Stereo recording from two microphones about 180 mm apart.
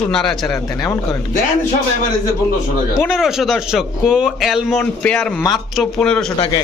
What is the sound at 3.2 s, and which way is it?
Speech, centre (ahead or behind).